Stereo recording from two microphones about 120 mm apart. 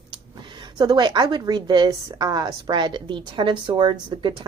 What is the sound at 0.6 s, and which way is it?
A woman's voice, 35° right (ahead or behind).